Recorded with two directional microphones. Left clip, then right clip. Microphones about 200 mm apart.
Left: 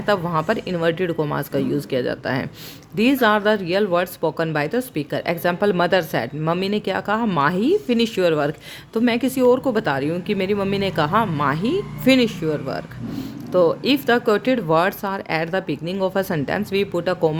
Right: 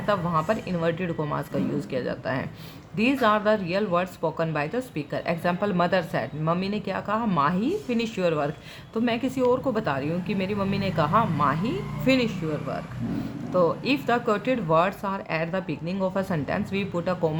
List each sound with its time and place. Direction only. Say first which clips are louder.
0.0 s speech: left 4 dB; 40° left (ahead or behind)